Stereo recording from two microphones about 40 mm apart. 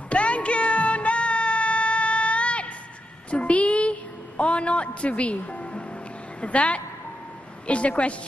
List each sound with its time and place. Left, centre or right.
0.1 s music: left
3.3 s a sound: left
6.4 s speech: left